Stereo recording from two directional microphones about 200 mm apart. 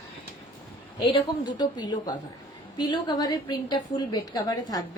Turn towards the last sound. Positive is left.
turn(degrees=20)  # may be behind; listen again after turning